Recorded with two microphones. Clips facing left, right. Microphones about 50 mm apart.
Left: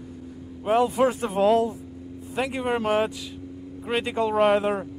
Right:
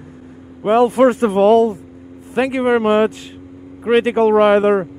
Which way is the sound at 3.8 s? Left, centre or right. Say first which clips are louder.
Right 12 dB; right.